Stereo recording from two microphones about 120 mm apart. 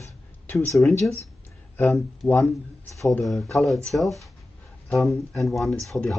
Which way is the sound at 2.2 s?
5° left (ahead or behind).